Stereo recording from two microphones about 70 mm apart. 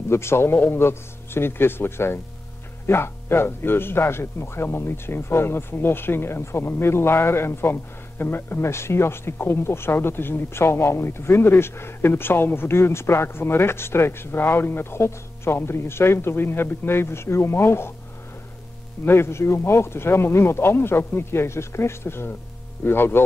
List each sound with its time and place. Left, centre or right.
0.1 s speech: left
19.0 s speech: left